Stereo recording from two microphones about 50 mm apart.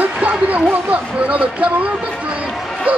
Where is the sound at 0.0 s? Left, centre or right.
Right.